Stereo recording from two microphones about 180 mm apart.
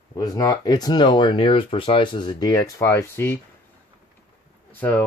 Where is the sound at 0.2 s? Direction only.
20° left (ahead or behind).